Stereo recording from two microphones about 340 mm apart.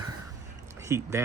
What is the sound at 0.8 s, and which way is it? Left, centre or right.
Speech, centre.